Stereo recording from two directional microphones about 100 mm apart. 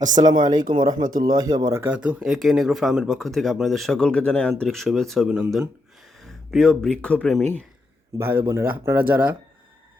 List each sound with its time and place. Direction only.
0.4 s speech: 50° right (ahead or behind)
1.8 s speech: 15° right (ahead or behind); by 7.4 s 5° left (ahead or behind)
8.2 s speech: 20° right (ahead or behind)